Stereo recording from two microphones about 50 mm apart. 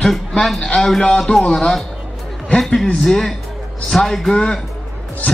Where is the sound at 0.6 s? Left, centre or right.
Centre.